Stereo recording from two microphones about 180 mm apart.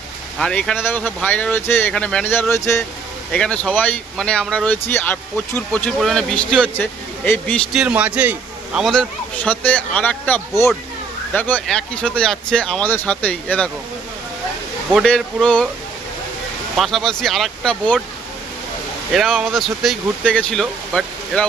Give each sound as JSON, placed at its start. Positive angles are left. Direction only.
{"t": 0.3, "sound": "speech", "side_deg": 5}
{"t": 7.7, "sound": "a man's voice", "side_deg": -5}
{"t": 14.9, "sound": "a man's voice", "side_deg": 5}
{"t": 16.7, "sound": "a man's voice", "side_deg": 0}
{"t": 19.1, "sound": "a man's voice", "side_deg": 0}